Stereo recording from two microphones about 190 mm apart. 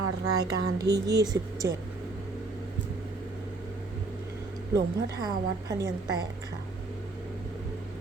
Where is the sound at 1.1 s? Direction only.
20° right (ahead or behind).